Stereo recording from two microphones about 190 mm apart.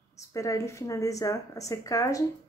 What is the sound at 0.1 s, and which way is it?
A woman's voice, 15° left (ahead or behind).